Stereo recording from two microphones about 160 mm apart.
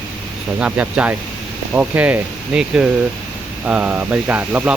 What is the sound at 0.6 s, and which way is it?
Speech, 5° right (ahead or behind).